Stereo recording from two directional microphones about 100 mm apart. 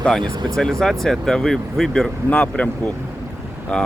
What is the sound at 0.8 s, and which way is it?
Speech, 5° left (ahead or behind).